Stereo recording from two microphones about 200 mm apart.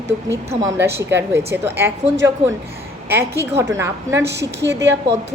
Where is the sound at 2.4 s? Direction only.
30° right (ahead or behind).